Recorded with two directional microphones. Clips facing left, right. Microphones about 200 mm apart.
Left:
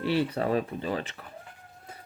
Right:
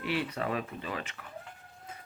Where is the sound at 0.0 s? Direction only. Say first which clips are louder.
Left 6 dB; 30° left (ahead or behind).